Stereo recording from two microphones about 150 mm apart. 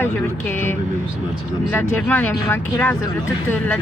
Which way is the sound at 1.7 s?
10° left (ahead or behind).